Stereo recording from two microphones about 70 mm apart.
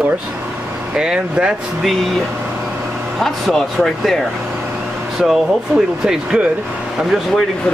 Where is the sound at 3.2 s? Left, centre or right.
Centre.